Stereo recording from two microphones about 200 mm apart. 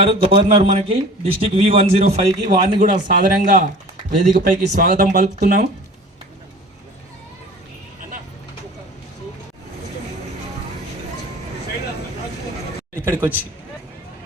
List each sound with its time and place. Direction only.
0.0 s a man's voice: 30° right (ahead or behind)
2.8 s speech: 40° right (ahead or behind)
13.1 s speech: 10° right (ahead or behind)